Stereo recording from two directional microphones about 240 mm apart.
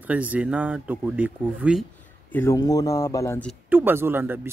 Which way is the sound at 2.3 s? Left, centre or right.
Centre.